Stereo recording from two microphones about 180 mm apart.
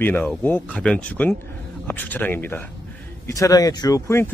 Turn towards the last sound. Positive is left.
turn(degrees=15)  # may be behind; listen again after turning